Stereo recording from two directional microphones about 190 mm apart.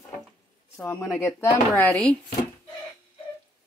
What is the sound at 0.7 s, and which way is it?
Speech, 15° left (ahead or behind).